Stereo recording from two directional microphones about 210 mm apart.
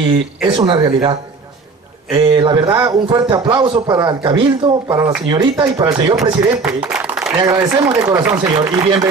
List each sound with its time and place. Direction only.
0.4 s a man's voice: 20° right (ahead or behind)
2.1 s a man's voice: 25° right (ahead or behind)
6.6 s a sound: 5° right (ahead or behind)
7.3 s speech: 20° right (ahead or behind)